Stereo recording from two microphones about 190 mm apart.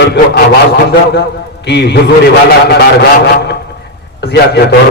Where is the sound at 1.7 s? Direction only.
65° left (ahead or behind).